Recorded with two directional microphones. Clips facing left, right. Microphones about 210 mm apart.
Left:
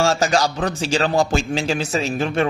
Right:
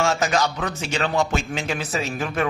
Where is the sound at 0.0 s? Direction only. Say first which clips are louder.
Left 3 dB; 35° left (ahead or behind).